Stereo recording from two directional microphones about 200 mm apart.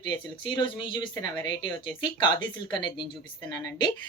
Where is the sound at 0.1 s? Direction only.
20° left (ahead or behind).